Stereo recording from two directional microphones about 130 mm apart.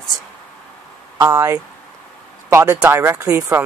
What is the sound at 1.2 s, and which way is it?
Speech, 25° right (ahead or behind).